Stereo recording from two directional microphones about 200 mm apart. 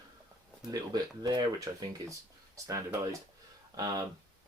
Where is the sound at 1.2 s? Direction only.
20° right (ahead or behind).